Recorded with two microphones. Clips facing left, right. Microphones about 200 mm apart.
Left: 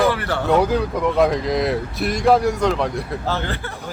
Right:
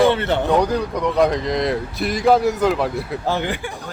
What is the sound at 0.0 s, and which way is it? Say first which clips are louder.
Speech: right 3 dB; 25° right (ahead or behind).